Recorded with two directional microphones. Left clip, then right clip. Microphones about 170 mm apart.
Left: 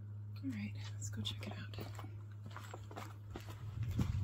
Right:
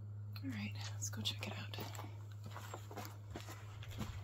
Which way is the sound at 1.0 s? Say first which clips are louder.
Right 3 dB; 35° left (ahead or behind).